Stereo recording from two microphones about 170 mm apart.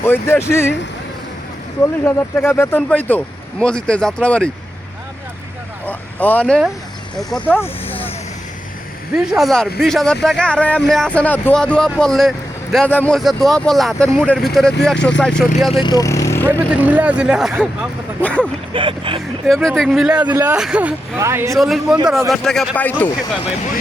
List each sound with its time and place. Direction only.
0.0 s speech: 15° left (ahead or behind)
2.0 s speech: 15° left (ahead or behind)
5.9 s speech: 10° left (ahead or behind)
7.9 s vehicle: 35° left (ahead or behind)
9.1 s speech: centre (ahead or behind)
15.7 s vehicle: 25° left (ahead or behind)
16.5 s speech: 10° right (ahead or behind)
18.2 s speech: 10° left (ahead or behind)
18.7 s speech: 30° right (ahead or behind)
19.5 s speech: centre (ahead or behind); by 21.5 s 15° right (ahead or behind)
21.5 s speech: centre (ahead or behind)